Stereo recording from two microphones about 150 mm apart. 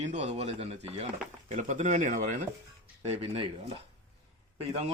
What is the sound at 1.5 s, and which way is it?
Speech, 55° right (ahead or behind).